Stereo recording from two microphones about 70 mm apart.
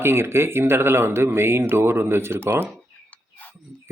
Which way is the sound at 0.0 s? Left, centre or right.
Right.